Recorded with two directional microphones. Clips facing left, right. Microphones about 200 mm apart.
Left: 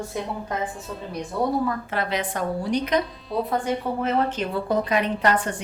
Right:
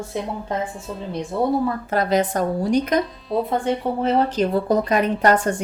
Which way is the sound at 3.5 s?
30° right (ahead or behind).